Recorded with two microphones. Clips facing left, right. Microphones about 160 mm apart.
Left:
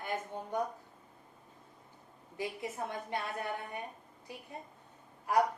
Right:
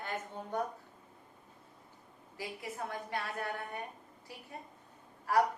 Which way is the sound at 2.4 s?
20° left (ahead or behind).